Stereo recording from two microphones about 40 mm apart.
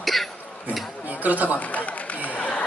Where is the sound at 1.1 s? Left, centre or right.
Right.